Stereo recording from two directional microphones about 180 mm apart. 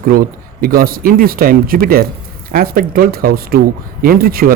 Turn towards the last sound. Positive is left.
turn(degrees=-55)  # may be behind; listen again after turning